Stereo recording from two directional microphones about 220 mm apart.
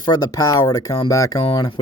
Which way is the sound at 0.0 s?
20° left (ahead or behind).